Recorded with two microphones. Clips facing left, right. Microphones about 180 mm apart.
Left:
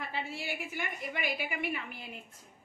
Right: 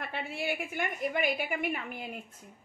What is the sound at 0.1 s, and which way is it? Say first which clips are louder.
A woman's voice: right 4 dB; 55° right (ahead or behind).